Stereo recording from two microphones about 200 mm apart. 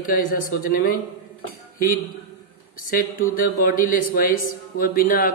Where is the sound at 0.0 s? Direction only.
45° left (ahead or behind).